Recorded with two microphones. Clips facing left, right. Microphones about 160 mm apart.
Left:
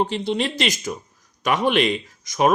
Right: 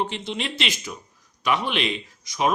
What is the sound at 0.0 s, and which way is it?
Speech, 35° left (ahead or behind).